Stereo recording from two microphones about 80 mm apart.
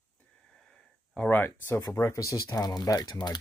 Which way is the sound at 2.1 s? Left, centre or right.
Left.